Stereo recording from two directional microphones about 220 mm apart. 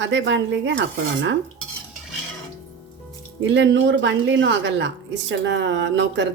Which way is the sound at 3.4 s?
55° right (ahead or behind).